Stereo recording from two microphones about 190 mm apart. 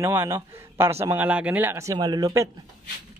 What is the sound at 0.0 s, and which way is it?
A man's voice, 15° right (ahead or behind).